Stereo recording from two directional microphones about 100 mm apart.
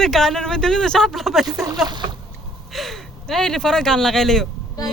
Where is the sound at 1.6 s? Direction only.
40° right (ahead or behind).